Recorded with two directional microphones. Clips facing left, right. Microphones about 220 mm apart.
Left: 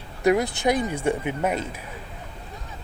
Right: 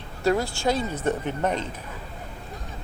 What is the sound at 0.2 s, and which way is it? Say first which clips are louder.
Speech: left 3 dB; 15° left (ahead or behind).